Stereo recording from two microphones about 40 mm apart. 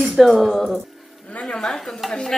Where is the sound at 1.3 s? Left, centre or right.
Left.